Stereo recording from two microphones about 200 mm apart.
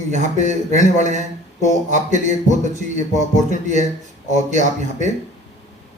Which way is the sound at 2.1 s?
35° right (ahead or behind).